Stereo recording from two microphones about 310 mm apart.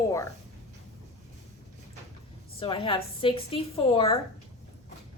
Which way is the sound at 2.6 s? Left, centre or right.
Centre.